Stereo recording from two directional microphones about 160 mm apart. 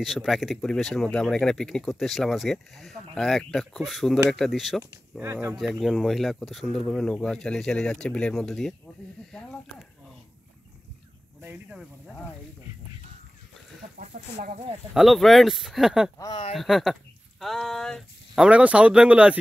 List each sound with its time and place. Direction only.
0.0 s speech: centre (ahead or behind)
5.2 s speech: 20° right (ahead or behind)
5.8 s speech: centre (ahead or behind)
11.4 s speech: 15° right (ahead or behind)
13.9 s speech: 55° right (ahead or behind)
15.0 s speech: centre (ahead or behind)